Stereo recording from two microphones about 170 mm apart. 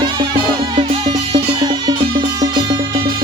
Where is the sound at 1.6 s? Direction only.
25° right (ahead or behind).